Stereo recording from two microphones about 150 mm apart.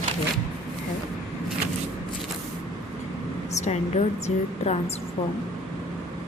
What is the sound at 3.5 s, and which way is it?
A woman's voice, 50° left (ahead or behind).